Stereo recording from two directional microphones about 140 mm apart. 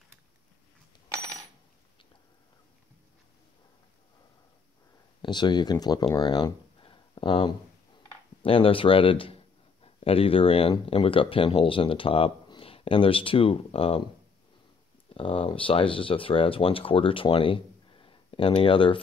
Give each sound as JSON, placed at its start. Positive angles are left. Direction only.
{"t": 5.2, "sound": "speech", "side_deg": 30}
{"t": 15.1, "sound": "speech", "side_deg": 40}